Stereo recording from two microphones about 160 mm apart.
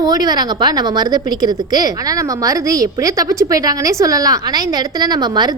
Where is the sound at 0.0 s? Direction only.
25° right (ahead or behind).